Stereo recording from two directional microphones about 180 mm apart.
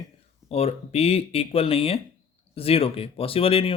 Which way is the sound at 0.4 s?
35° left (ahead or behind).